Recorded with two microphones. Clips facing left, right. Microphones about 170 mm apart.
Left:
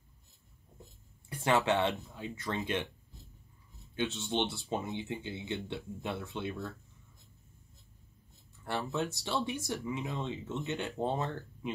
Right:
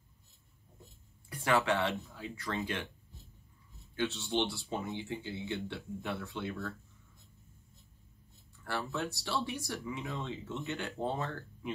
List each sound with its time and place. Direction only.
1.3 s speech: 25° left (ahead or behind)
3.9 s speech: 20° left (ahead or behind)
8.6 s speech: 20° left (ahead or behind)